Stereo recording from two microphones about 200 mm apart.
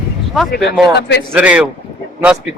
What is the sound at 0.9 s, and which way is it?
Speech, 55° left (ahead or behind).